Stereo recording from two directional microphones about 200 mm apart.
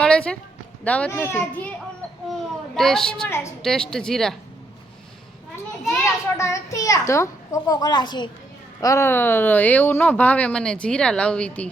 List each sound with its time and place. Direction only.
0.0 s a sound: 5° left (ahead or behind)
0.9 s speech: 5° left (ahead or behind)
2.7 s a woman's voice: centre (ahead or behind)
5.9 s speech: 15° left (ahead or behind)